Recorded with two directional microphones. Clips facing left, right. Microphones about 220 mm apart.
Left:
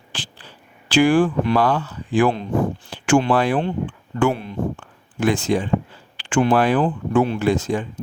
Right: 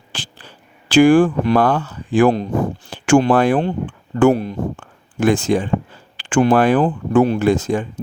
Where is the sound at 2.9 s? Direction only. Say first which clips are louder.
Right 4 dB; 45° right (ahead or behind).